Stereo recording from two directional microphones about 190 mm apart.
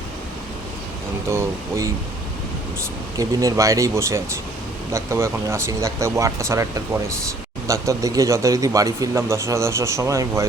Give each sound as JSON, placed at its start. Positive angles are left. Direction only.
{"t": 1.3, "sound": "speech", "side_deg": -15}
{"t": 3.2, "sound": "speech", "side_deg": -15}